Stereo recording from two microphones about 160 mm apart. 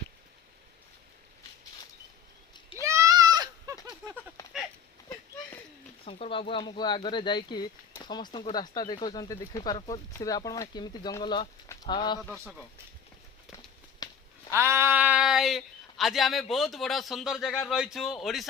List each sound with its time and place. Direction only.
2.5 s a sound: 30° left (ahead or behind)
2.8 s goat: 20° right (ahead or behind)
6.1 s speech: 35° left (ahead or behind)
12.2 s speech: centre (ahead or behind)
14.0 s a sound: 25° left (ahead or behind)
14.5 s speech: 15° right (ahead or behind); by 18.4 s centre (ahead or behind)